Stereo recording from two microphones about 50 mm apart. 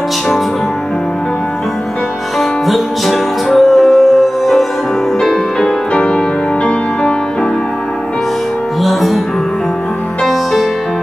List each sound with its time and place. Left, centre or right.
2.6 s music: centre
5.9 s music: left
8.8 s music: centre
10.2 s music: centre